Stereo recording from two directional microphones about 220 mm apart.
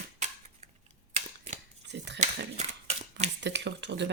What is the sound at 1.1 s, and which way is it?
Scissors, 30° right (ahead or behind).